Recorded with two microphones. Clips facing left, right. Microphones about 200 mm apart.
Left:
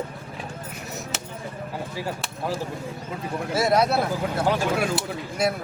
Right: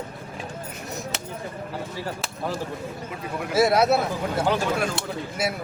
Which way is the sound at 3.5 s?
5° right (ahead or behind).